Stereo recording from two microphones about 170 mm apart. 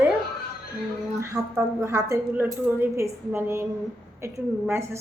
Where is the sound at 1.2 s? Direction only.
15° right (ahead or behind).